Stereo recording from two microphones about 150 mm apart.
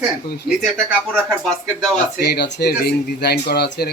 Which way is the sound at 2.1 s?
90° left.